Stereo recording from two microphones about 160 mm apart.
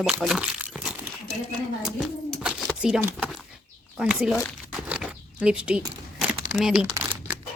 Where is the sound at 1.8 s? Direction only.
5° right (ahead or behind).